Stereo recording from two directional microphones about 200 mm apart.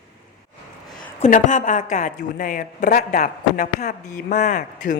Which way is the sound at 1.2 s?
40° left (ahead or behind).